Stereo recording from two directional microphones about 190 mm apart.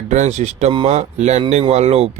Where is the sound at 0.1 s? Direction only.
40° right (ahead or behind).